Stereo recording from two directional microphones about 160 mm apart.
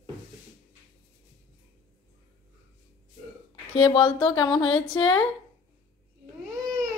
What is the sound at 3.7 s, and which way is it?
Speech, 35° left (ahead or behind).